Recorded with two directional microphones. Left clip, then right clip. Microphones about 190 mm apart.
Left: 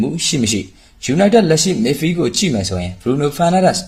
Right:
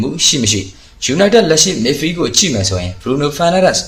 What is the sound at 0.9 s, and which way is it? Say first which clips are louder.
Speech: right 2 dB; 40° left (ahead or behind).